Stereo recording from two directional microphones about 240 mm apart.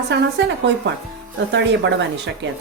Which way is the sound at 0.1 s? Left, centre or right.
Right.